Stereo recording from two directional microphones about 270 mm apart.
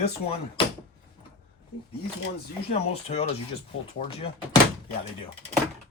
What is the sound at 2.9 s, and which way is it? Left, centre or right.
Speech, left.